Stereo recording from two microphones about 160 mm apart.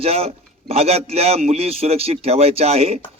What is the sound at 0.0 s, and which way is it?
A man's voice, 40° right (ahead or behind).